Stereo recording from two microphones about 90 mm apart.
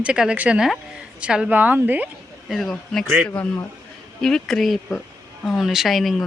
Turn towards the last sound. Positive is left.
turn(degrees=0)  # may be behind; listen again after turning